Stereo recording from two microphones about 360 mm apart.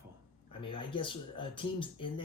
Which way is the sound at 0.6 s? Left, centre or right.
Centre.